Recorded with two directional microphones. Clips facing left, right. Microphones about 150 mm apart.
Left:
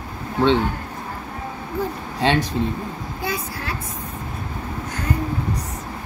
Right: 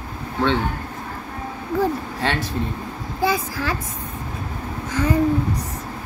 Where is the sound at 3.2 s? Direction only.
90° right.